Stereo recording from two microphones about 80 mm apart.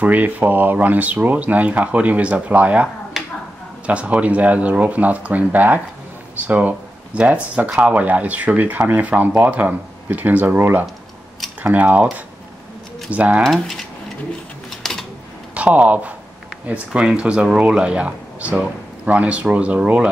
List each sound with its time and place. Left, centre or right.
0.0 s speech: centre
3.1 s a sound: centre
3.8 s speech: centre
13.1 s speech: centre
13.4 s speech: centre
14.8 s typing: centre
15.5 s speech: centre